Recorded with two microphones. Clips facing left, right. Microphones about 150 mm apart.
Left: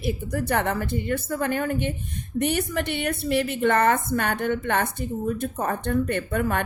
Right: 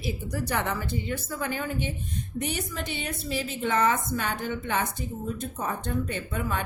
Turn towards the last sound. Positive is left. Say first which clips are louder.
# left 6 dB
turn(degrees=60)  # may be behind; listen again after turning